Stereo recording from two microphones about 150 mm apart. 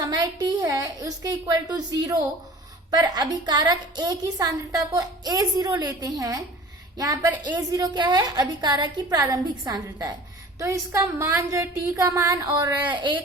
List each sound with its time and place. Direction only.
0.0 s a woman's voice: 25° right (ahead or behind)